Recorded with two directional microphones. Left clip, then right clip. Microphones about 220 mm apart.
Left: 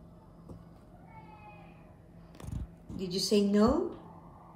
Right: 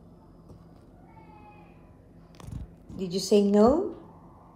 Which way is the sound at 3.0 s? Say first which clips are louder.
Right 6 dB; 10° left (ahead or behind).